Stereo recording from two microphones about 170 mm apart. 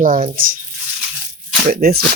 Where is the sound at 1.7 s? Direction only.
65° right (ahead or behind).